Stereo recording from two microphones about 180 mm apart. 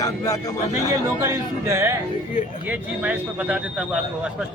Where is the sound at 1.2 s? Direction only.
15° right (ahead or behind).